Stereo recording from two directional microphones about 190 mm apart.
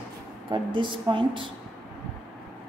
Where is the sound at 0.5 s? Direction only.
25° right (ahead or behind).